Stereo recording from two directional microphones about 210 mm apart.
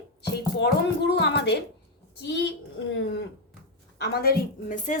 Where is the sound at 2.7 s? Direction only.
55° left (ahead or behind).